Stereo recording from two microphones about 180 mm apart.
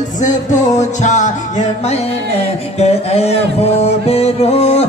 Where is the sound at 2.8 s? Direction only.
35° left (ahead or behind).